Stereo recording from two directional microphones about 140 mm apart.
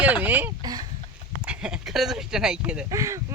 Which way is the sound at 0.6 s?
30° right (ahead or behind).